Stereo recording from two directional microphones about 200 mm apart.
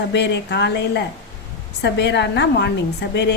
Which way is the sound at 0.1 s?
60° left (ahead or behind).